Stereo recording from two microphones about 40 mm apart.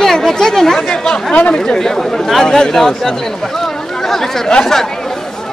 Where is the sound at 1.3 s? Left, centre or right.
Left.